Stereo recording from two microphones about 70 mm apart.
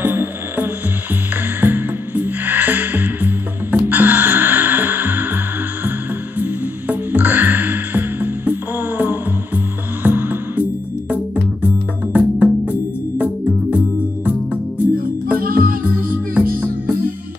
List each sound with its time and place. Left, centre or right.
0.0 s music: right